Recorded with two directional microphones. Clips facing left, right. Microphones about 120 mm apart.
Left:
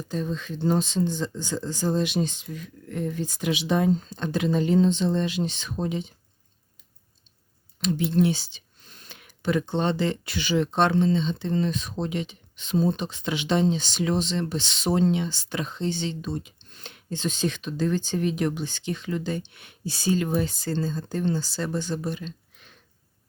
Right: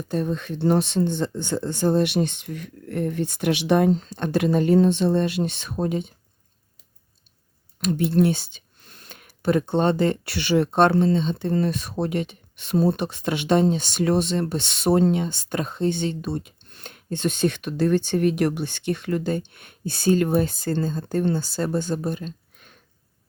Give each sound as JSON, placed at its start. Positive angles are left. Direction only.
{"t": 0.1, "sound": "speech", "side_deg": -55}
{"t": 7.8, "sound": "speech", "side_deg": -50}